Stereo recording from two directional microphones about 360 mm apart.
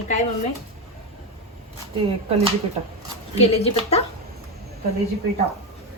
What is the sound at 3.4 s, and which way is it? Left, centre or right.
Speech, centre.